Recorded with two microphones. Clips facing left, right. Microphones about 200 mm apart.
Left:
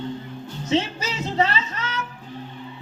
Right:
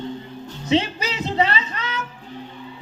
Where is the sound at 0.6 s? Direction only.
15° right (ahead or behind).